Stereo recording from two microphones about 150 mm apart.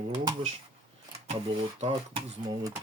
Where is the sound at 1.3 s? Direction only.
45° right (ahead or behind).